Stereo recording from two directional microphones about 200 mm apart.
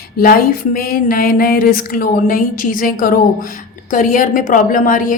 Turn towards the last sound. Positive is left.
turn(degrees=45)  # may be behind; listen again after turning